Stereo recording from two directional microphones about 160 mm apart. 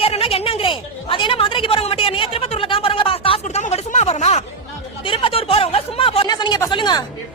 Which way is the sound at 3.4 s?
45° left (ahead or behind).